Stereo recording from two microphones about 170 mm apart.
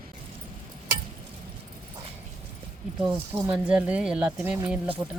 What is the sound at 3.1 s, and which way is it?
Speech, 25° right (ahead or behind).